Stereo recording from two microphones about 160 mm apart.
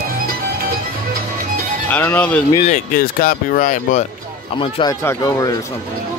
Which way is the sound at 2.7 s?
60° left (ahead or behind).